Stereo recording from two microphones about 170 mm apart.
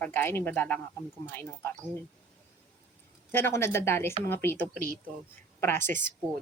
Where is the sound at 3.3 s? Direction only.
15° left (ahead or behind).